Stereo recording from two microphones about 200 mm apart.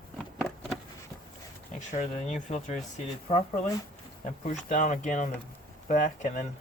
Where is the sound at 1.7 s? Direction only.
35° left (ahead or behind).